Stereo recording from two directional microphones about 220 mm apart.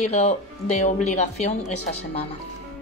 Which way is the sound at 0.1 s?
30° left (ahead or behind).